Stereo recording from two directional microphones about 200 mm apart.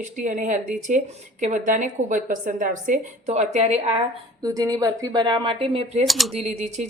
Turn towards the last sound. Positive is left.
turn(degrees=-35)  # may be behind; listen again after turning